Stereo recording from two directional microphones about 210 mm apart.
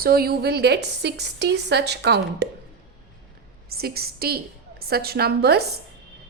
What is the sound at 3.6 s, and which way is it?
A woman's voice, 45° right (ahead or behind).